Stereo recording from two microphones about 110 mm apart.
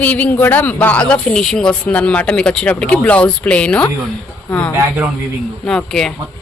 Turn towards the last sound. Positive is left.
turn(degrees=5)  # may be behind; listen again after turning